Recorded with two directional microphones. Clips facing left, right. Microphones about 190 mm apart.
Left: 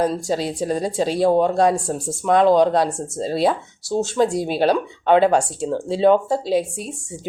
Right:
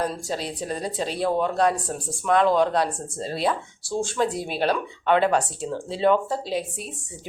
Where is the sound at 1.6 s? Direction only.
25° left (ahead or behind).